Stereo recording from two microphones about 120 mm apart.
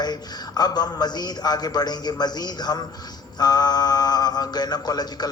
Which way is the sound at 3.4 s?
35° left (ahead or behind).